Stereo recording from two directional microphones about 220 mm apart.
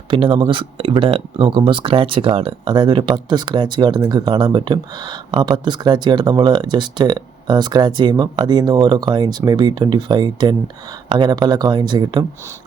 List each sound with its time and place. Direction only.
0.1 s speech: 20° right (ahead or behind)